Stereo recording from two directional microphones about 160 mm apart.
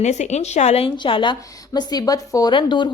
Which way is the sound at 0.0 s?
45° left (ahead or behind).